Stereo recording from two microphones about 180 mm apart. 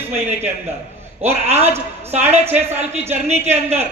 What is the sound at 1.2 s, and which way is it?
A man's voice, 35° right (ahead or behind).